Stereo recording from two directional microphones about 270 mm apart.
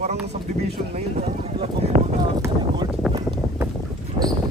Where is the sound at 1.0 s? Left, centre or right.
Right.